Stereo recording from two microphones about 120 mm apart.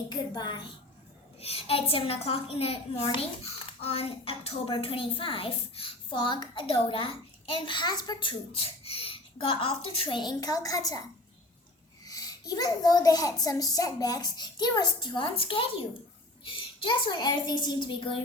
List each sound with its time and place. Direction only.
0.1 s a child's voice: 40° left (ahead or behind)
1.4 s a woman's voice: 55° left (ahead or behind); by 11.0 s 30° left (ahead or behind)
12.0 s a child's voice: 30° left (ahead or behind)